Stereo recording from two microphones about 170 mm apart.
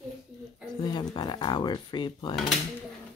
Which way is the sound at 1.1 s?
25° left (ahead or behind).